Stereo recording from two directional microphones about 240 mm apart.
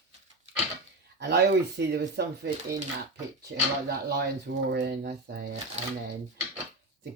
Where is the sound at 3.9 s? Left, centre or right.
Right.